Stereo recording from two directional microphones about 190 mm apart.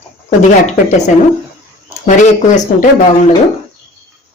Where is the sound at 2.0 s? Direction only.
40° left (ahead or behind).